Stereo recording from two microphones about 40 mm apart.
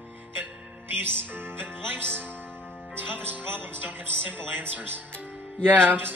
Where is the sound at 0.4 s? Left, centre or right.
Right.